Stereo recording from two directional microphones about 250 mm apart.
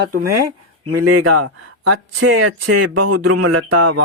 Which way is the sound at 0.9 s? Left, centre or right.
Right.